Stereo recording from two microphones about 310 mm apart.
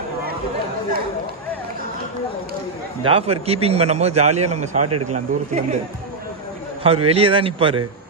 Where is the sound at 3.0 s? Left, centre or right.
Centre.